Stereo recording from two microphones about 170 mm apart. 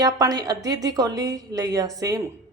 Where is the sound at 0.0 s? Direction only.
20° right (ahead or behind).